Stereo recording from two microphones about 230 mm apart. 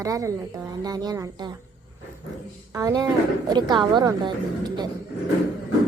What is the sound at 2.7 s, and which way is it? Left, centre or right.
A woman's voice, centre.